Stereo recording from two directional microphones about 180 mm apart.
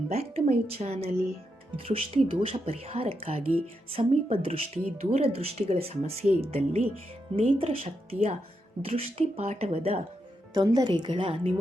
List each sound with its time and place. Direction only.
0.1 s speech: 35° right (ahead or behind)
6.2 s speech: 10° right (ahead or behind)
6.5 s speech: 35° right (ahead or behind)
10.5 s a woman's voice: 20° right (ahead or behind)